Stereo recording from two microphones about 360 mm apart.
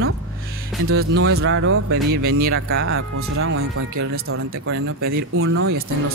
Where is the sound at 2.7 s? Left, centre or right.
Right.